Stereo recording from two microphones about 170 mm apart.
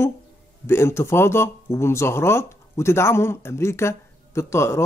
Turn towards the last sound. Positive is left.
turn(degrees=15)  # may be behind; listen again after turning